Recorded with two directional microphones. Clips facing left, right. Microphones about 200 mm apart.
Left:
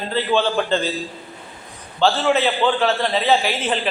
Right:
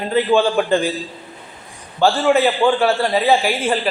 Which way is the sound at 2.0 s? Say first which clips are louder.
Right 3 dB; 10° right (ahead or behind).